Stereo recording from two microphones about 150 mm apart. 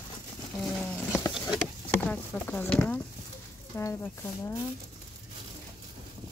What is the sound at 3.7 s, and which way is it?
Speech, 20° left (ahead or behind).